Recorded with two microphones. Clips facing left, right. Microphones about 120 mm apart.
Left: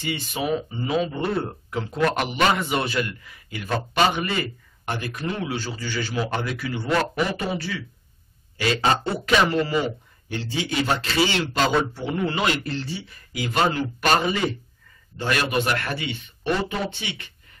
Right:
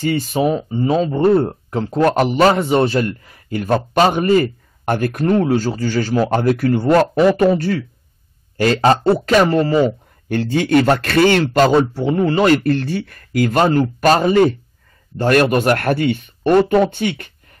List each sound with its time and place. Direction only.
0.0 s speech: 40° right (ahead or behind)
10.2 s speech: 55° right (ahead or behind)
11.7 s speech: 35° right (ahead or behind); by 17.3 s 50° right (ahead or behind)